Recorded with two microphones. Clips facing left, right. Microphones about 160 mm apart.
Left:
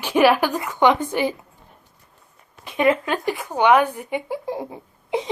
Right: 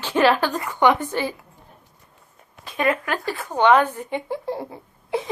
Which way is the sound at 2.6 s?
20° left (ahead or behind).